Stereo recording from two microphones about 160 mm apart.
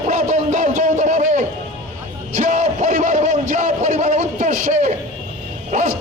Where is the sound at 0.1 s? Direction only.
50° right (ahead or behind).